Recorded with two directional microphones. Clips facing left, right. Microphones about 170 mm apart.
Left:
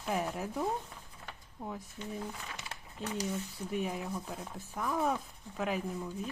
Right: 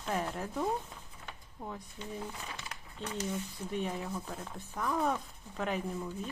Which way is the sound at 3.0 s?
5° left (ahead or behind).